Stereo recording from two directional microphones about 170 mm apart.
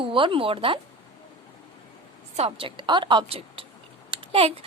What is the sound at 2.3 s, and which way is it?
A woman's voice, 35° right (ahead or behind).